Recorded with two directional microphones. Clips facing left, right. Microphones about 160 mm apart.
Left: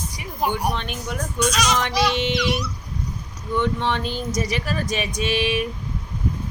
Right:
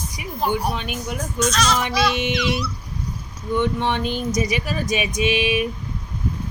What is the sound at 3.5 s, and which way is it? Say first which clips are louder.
Speech: right 1 dB; 15° right (ahead or behind).